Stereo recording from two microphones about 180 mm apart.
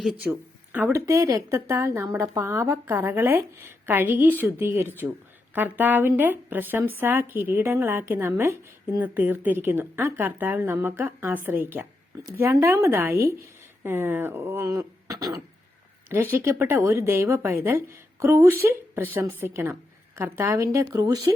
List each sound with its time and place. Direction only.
0.0 s speech: 5° right (ahead or behind)